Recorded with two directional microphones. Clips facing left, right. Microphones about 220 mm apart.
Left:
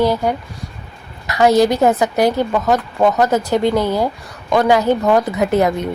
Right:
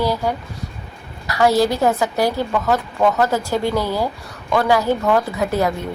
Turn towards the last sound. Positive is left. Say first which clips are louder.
# left 4 dB
turn(degrees=20)  # may be behind; listen again after turning